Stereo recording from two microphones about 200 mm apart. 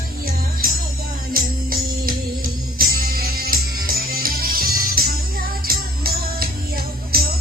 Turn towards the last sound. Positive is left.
turn(degrees=-50)  # may be behind; listen again after turning